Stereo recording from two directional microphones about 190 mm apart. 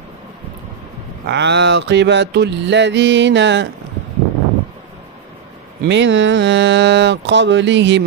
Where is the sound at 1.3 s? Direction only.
65° right (ahead or behind).